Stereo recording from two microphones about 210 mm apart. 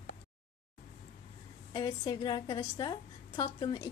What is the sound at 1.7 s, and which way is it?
A woman's voice, 20° left (ahead or behind).